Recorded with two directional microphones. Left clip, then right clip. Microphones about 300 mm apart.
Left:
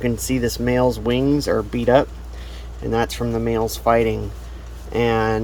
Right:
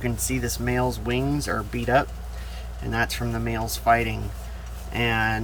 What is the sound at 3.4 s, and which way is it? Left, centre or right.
Speech, centre.